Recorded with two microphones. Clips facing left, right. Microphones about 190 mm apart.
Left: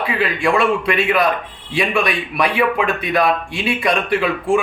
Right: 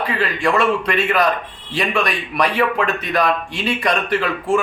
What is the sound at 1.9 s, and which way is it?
A man's voice, 5° left (ahead or behind).